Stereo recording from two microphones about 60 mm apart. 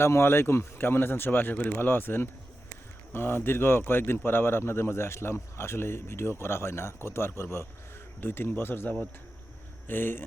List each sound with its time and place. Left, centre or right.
0.0 s speech: left